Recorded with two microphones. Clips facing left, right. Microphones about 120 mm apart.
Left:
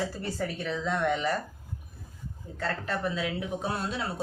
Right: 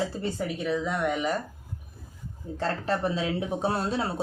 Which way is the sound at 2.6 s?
30° right (ahead or behind).